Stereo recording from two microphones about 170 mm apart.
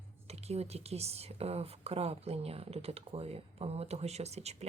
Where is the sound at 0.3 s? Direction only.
40° right (ahead or behind).